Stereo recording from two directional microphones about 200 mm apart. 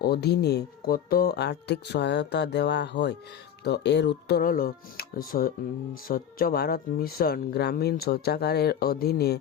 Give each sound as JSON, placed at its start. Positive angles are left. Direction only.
{"t": 0.0, "sound": "speech", "side_deg": 55}